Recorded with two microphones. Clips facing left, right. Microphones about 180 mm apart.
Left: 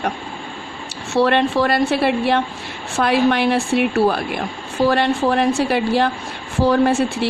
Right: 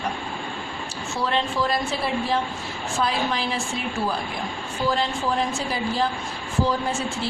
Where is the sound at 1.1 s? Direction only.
70° left (ahead or behind).